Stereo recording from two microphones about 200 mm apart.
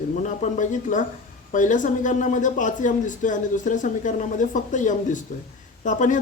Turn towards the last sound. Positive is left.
turn(degrees=40)  # may be behind; listen again after turning